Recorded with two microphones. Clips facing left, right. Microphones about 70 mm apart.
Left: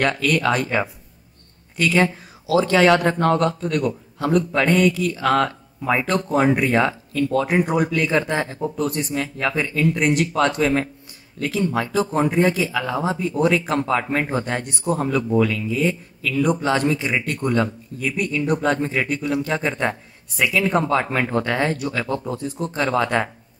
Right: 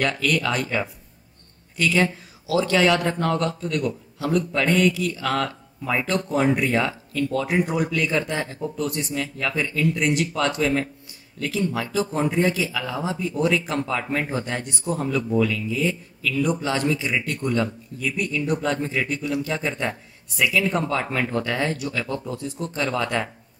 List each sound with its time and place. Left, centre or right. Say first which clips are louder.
0.0 s speech: left 3 dB; left
11.3 s speech: left 3 dB; left
11.7 s speech: left 4 dB; left